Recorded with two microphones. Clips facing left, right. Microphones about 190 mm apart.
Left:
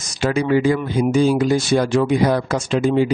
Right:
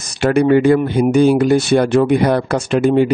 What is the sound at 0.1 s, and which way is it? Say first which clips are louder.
Speech: right 5 dB; 60° right (ahead or behind).